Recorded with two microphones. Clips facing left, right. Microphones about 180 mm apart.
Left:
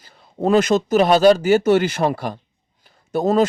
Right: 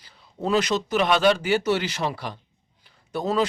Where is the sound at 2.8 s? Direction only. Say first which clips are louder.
Left 7 dB; 45° left (ahead or behind).